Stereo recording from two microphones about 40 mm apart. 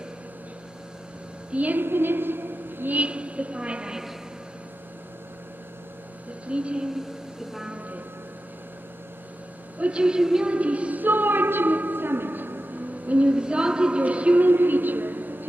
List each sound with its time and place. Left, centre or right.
1.5 s a woman's voice: right
1.8 s a woman's voice: right
2.9 s a woman's voice: right
6.4 s a woman's voice: right
9.8 s a woman's voice: right
10.5 s speech: right
11.1 s a sound: right
13.1 s a woman's voice: right
14.0 s a woman's voice: right
14.4 s music: right